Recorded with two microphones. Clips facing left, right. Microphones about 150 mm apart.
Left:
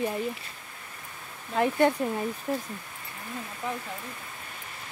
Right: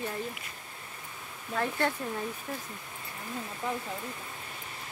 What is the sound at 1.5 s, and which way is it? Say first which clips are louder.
Speech: left 7 dB; 15° left (ahead or behind).